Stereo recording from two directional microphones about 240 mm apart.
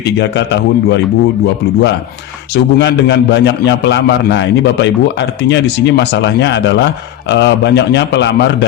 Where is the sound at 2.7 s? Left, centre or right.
Left.